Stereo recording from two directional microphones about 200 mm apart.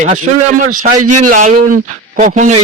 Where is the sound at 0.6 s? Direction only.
40° right (ahead or behind).